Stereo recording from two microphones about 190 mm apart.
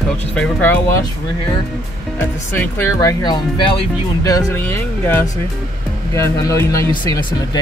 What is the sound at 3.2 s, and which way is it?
Speech, 25° left (ahead or behind).